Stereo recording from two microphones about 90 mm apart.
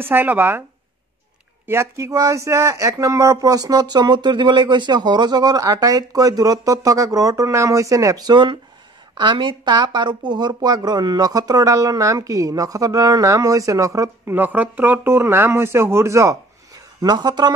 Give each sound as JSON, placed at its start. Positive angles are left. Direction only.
{"t": 0.0, "sound": "speech", "side_deg": -20}
{"t": 1.7, "sound": "speech", "side_deg": -30}
{"t": 14.3, "sound": "speech", "side_deg": -20}